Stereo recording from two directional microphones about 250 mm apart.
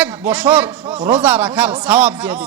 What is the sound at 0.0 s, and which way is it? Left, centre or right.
A man's voice, centre.